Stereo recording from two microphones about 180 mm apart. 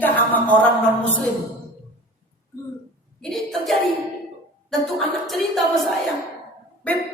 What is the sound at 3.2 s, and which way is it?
A woman's voice, centre (ahead or behind).